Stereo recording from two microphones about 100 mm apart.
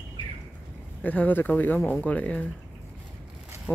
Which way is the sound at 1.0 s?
15° left (ahead or behind).